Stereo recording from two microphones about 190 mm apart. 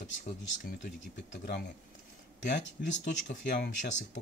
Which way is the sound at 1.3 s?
50° left (ahead or behind).